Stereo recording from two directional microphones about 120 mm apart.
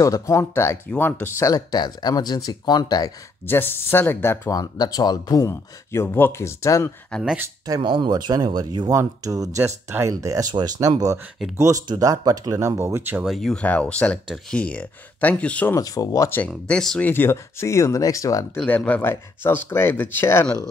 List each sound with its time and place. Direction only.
0.0 s speech: 25° left (ahead or behind)
1.5 s speech: 35° left (ahead or behind)
3.4 s speech: 20° left (ahead or behind)
4.5 s speech: 30° left (ahead or behind)
7.1 s speech: 5° left (ahead or behind)
7.6 s speech: 35° right (ahead or behind); by 13.2 s 20° right (ahead or behind)
13.2 s speech: centre (ahead or behind)
15.7 s speech: 30° left (ahead or behind)
16.4 s speech: 5° left (ahead or behind)
17.0 s speech: 15° left (ahead or behind)
18.6 s speech: 10° left (ahead or behind)